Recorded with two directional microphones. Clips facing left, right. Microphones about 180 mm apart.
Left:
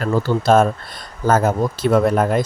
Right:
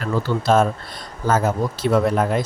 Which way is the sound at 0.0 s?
45° left (ahead or behind).